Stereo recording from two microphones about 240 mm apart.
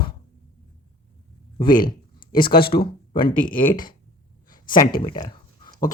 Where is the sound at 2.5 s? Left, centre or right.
Left.